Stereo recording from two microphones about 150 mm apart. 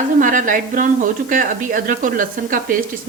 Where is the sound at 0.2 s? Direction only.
60° right (ahead or behind).